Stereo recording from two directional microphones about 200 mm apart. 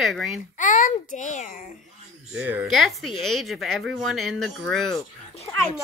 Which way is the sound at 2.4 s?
10° right (ahead or behind).